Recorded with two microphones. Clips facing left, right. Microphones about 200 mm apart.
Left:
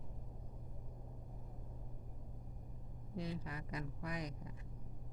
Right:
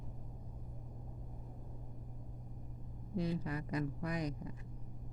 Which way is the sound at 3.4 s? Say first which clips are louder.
Right 8 dB; 50° right (ahead or behind).